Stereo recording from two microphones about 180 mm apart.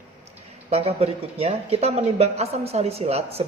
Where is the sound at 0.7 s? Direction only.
35° right (ahead or behind).